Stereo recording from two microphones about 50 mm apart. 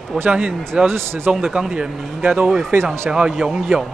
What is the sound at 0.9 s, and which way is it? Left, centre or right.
Speech, right.